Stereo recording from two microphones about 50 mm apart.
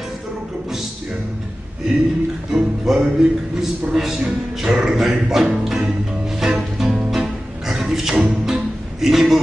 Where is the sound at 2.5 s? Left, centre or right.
Centre.